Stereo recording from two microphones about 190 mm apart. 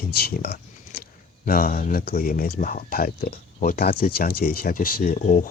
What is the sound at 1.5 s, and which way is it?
Speech, 50° left (ahead or behind).